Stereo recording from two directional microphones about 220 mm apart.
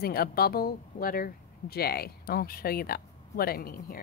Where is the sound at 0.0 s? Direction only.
45° left (ahead or behind).